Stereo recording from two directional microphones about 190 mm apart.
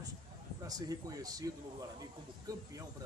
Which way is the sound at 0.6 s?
20° right (ahead or behind).